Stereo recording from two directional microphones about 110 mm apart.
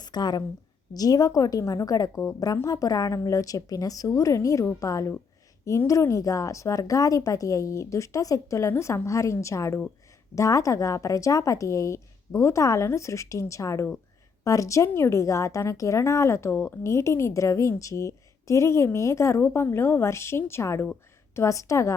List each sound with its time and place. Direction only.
0.0 s a woman's voice: 40° left (ahead or behind)